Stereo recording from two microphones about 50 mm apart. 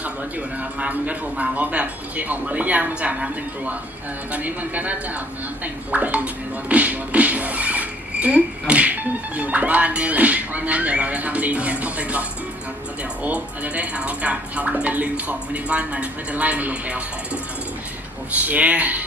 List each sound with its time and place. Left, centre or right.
0.0 s speech: right
4.3 s speech: right
13.2 s speech: right
18.3 s speech: right